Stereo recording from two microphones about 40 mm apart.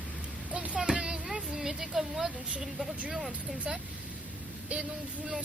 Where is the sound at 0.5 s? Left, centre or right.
Right.